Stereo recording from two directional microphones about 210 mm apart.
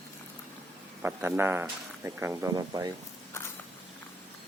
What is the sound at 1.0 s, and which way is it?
Speech, 10° right (ahead or behind).